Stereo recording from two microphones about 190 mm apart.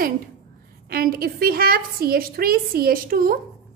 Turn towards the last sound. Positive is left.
turn(degrees=-50)  # may be behind; listen again after turning